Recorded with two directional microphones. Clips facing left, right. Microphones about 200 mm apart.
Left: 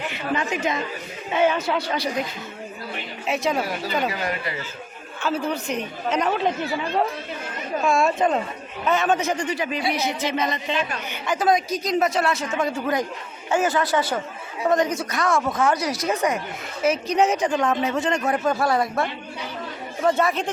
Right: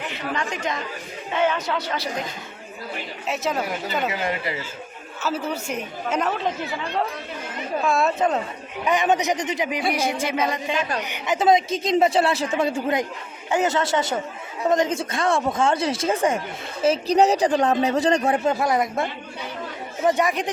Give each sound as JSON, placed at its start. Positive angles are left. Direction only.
{"t": 0.1, "sound": "speech", "side_deg": 5}
{"t": 3.2, "sound": "speech", "side_deg": 0}
{"t": 4.0, "sound": "a man's voice", "side_deg": -25}
{"t": 5.2, "sound": "speech", "side_deg": -5}
{"t": 7.8, "sound": "speech", "side_deg": 0}
{"t": 8.8, "sound": "a man's voice", "side_deg": -15}
{"t": 18.6, "sound": "a man's voice", "side_deg": -20}